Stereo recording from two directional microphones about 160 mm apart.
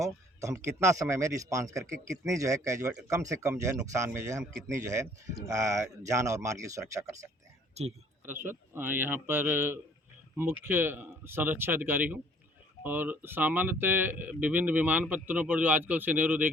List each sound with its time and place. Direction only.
0.0 s speech: 20° right (ahead or behind)
7.8 s speech: 45° right (ahead or behind)
8.2 s speech: 15° right (ahead or behind)